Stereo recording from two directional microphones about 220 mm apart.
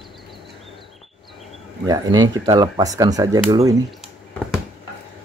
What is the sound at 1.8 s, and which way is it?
Speech, 15° right (ahead or behind).